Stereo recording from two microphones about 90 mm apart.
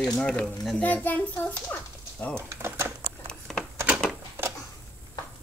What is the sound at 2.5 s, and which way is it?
Typing, 30° right (ahead or behind).